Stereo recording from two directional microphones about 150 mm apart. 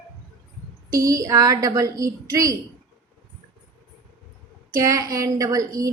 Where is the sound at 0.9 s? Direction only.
20° right (ahead or behind).